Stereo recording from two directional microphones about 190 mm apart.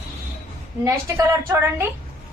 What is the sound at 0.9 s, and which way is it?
A woman's voice, 15° right (ahead or behind).